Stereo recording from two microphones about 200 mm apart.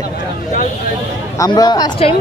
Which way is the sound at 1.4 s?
20° left (ahead or behind).